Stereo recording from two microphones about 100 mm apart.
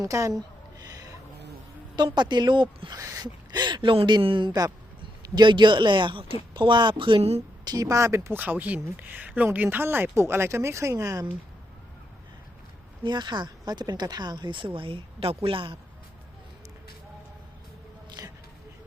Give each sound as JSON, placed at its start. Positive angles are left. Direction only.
{"t": 0.0, "sound": "a sound", "side_deg": -35}
{"t": 2.0, "sound": "speech", "side_deg": -50}
{"t": 2.9, "sound": "speech", "side_deg": -35}
{"t": 5.2, "sound": "speech", "side_deg": -45}
{"t": 7.2, "sound": "a woman's voice", "side_deg": -90}
{"t": 7.6, "sound": "speech", "side_deg": -40}
{"t": 13.0, "sound": "speech", "side_deg": -50}
{"t": 18.2, "sound": "a sound", "side_deg": -40}